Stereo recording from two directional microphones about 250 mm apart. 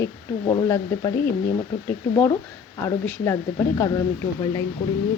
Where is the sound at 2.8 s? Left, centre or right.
Centre.